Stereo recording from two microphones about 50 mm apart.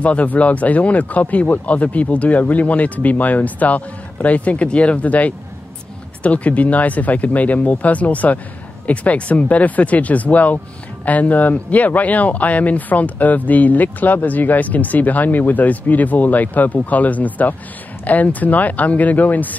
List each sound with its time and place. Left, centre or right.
0.0 s speech: left